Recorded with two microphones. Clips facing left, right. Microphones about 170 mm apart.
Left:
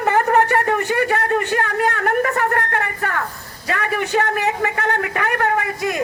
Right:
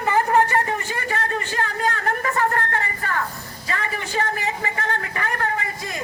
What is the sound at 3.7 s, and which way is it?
A man's voice, 60° left (ahead or behind).